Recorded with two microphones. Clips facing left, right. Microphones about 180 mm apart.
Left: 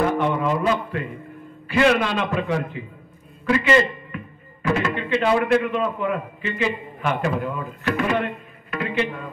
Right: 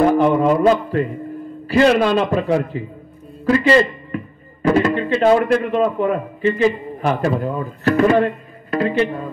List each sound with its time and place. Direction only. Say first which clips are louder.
0.2 s mantra: right 7 dB; 35° right (ahead or behind)
0.6 s a man's voice: right 8 dB; 40° right (ahead or behind)
3.4 s a sound: right 4 dB; 35° right (ahead or behind)
4.6 s a man's voice: right 7 dB; 40° right (ahead or behind)